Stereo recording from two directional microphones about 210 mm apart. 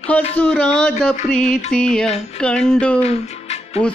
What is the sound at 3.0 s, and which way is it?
Music, 30° left (ahead or behind).